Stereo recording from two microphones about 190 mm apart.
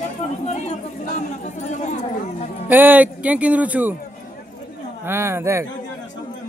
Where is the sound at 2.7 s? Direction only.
10° right (ahead or behind).